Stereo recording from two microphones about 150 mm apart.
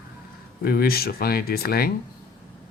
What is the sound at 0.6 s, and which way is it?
Speech, 85° left.